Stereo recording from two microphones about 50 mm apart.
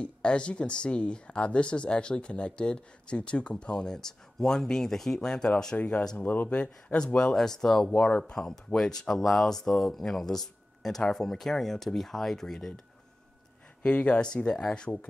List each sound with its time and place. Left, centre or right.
0.0 s speech: left
6.1 s speech: left
6.6 s speech: left
7.2 s speech: centre
13.8 s speech: left